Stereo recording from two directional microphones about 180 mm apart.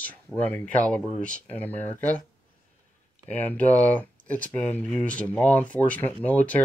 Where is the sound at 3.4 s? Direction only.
10° left (ahead or behind).